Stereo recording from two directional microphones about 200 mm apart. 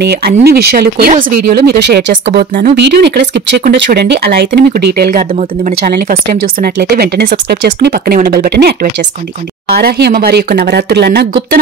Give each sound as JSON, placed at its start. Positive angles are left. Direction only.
{"t": 0.0, "sound": "speech", "side_deg": -55}